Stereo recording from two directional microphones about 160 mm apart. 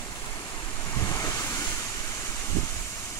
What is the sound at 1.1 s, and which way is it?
Waves, 20° left (ahead or behind).